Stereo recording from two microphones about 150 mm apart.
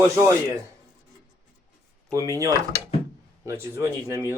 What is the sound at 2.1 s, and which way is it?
Speech, 20° right (ahead or behind).